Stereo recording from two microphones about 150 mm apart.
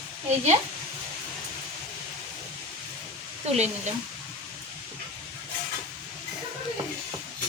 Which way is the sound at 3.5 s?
50° right (ahead or behind).